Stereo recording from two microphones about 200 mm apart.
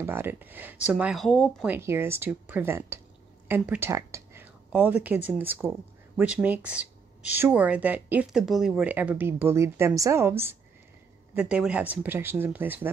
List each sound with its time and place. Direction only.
0.0 s speech: 10° right (ahead or behind)
1.7 s speech: 10° right (ahead or behind)